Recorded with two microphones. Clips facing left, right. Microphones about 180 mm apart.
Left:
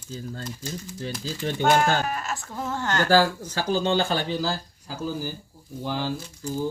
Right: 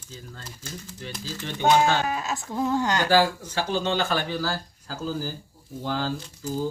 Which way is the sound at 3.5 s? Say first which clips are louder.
Left 3 dB; 35° left (ahead or behind).